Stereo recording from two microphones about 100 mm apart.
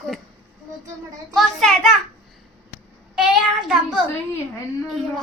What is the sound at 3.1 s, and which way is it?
Child singing, 5° right (ahead or behind).